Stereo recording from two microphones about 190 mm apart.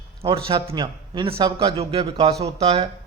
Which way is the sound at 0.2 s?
30° right (ahead or behind).